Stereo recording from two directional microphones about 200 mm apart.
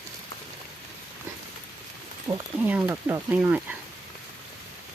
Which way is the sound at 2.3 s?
10° right (ahead or behind).